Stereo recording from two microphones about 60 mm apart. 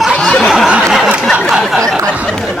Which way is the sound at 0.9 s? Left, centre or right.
Centre.